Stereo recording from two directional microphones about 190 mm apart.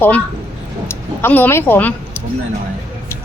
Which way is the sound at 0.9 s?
10° left (ahead or behind).